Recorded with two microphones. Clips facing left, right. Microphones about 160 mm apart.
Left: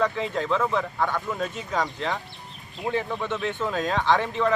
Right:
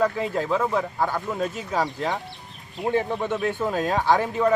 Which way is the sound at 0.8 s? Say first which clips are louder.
Right 1 dB; 30° right (ahead or behind).